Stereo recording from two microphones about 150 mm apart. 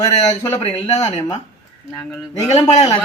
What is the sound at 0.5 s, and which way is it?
Speech, 40° left (ahead or behind).